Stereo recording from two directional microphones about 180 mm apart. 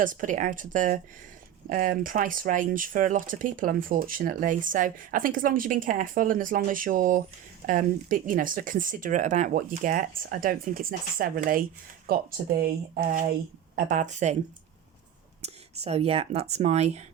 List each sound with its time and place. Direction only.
0.0 s speech: 45° right (ahead or behind)
15.4 s speech: 35° right (ahead or behind)